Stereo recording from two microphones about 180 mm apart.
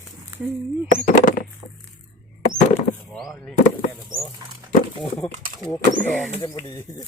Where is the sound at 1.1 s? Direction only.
50° left (ahead or behind).